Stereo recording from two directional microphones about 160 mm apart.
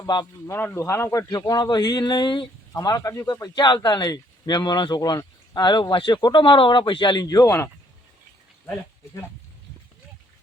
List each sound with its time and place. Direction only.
0.0 s speech: 25° left (ahead or behind)